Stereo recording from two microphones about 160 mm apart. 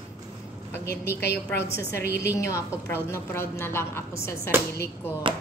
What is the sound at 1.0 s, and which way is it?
A woman's voice, 15° left (ahead or behind).